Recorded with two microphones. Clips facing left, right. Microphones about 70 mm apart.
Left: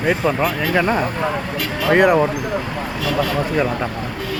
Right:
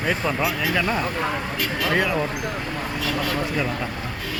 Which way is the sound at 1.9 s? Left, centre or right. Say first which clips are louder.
Left 10 dB; left.